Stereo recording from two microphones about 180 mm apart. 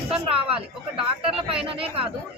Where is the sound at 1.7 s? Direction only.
30° right (ahead or behind).